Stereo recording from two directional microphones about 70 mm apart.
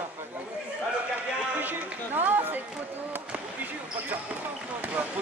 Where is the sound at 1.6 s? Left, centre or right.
Right.